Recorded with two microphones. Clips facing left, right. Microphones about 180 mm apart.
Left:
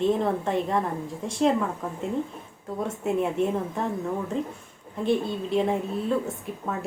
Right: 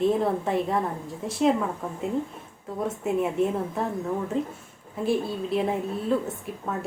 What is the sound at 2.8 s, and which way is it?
A woman's voice, centre (ahead or behind).